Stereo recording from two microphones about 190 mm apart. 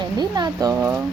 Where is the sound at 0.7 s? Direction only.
10° right (ahead or behind).